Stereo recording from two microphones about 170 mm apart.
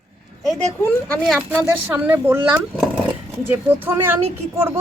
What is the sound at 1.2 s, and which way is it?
Speech, 5° right (ahead or behind).